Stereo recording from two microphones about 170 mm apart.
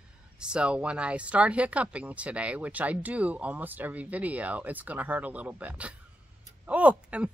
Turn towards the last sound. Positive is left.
turn(degrees=-5)  # may be behind; listen again after turning